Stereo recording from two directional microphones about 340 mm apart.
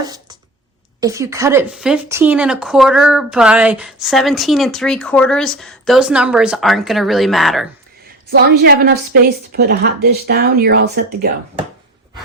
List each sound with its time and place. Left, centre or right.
0.0 s a sound: centre
1.0 s speech: centre
8.3 s a woman's voice: right